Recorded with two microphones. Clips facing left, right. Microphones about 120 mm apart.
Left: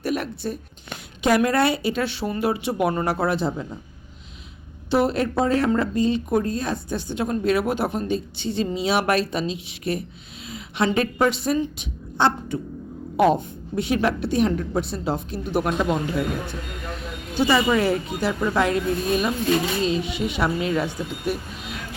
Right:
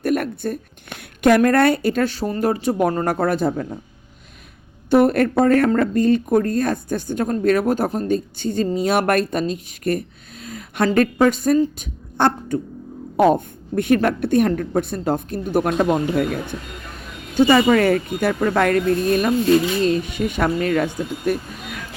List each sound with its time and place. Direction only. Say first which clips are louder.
0.0 s a woman's voice: right 5 dB; 50° right (ahead or behind)
4.9 s a woman's voice: right 6 dB; 50° right (ahead or behind)